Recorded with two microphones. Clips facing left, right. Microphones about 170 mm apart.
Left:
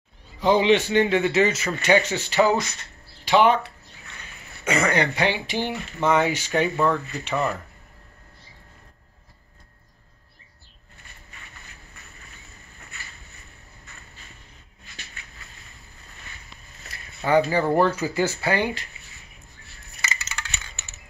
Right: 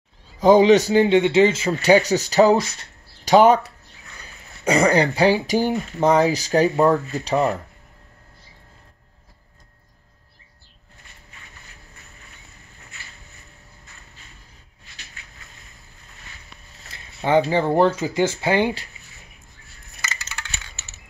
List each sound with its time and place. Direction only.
0.4 s speech: 40° right (ahead or behind)
1.0 s speech: 25° right (ahead or behind)
16.9 s speech: 25° right (ahead or behind)